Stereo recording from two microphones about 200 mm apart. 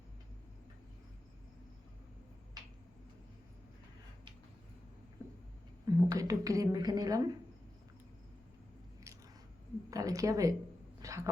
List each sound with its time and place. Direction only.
5.8 s a woman's voice: 15° right (ahead or behind)
9.9 s a woman's voice: 15° right (ahead or behind)
11.0 s dog: 15° right (ahead or behind)